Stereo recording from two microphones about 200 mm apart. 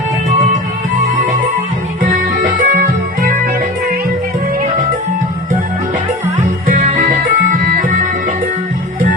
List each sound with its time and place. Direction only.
2.0 s music: 40° right (ahead or behind)
6.7 s music: 40° right (ahead or behind)